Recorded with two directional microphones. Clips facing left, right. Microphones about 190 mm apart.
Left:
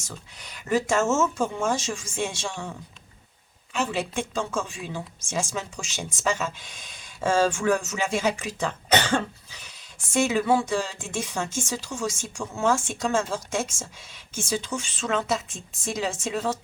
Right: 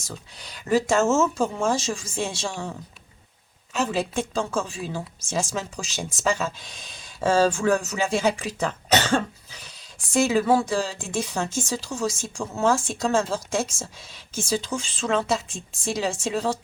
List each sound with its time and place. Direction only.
0.0 s speech: 35° right (ahead or behind)
3.8 s speech: 35° right (ahead or behind)
10.1 s speech: 35° right (ahead or behind)